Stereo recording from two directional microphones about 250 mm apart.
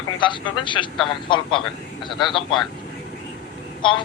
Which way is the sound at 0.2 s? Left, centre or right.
Centre.